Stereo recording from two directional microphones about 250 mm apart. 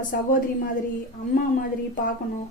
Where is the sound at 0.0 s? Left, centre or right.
Left.